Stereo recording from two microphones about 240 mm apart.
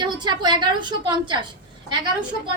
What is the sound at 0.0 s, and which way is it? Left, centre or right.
A woman's voice, centre.